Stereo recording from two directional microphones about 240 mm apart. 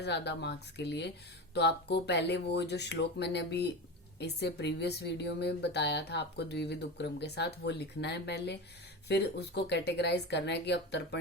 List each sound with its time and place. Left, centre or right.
0.0 s a woman's voice: left